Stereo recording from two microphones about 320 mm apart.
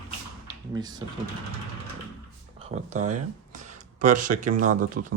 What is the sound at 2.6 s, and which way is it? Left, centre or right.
Speech, right.